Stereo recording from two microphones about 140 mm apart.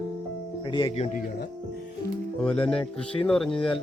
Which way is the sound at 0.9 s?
50° left (ahead or behind).